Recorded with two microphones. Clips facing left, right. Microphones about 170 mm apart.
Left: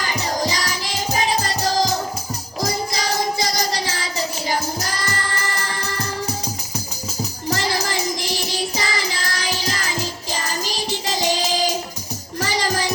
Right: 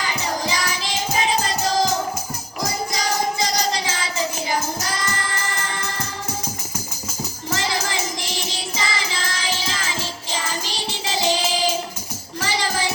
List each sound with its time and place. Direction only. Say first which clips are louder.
0.0 s music: left 2 dB; 40° left (ahead or behind)
3.5 s music: even; 35° left (ahead or behind)
5.1 s music: left 1 dB; 35° left (ahead or behind)
7.5 s music: left 1 dB; 40° left (ahead or behind)